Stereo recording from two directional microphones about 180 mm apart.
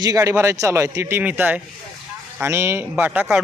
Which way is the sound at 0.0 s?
20° right (ahead or behind).